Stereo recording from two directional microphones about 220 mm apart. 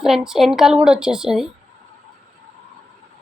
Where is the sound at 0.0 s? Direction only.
Centre (ahead or behind).